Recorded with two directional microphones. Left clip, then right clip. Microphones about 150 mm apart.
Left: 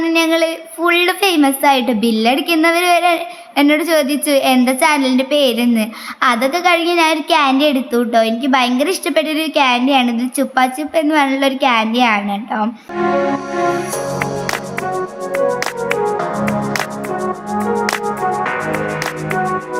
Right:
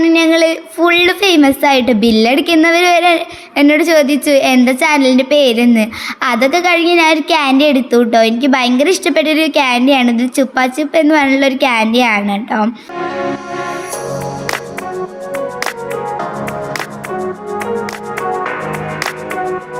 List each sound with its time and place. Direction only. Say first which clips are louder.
0.0 s a woman's voice: right 4 dB; 25° right (ahead or behind)
15.6 s music: left 2 dB; centre (ahead or behind)